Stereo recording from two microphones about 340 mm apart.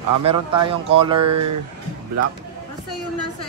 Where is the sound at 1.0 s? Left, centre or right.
Centre.